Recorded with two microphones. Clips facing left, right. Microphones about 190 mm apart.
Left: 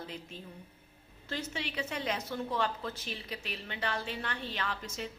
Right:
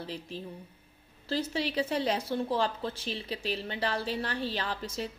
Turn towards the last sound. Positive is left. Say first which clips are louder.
# right 4 dB
turn(degrees=-35)  # may be behind; listen again after turning